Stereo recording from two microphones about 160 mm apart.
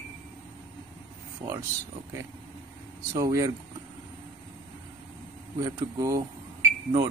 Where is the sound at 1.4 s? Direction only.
35° right (ahead or behind).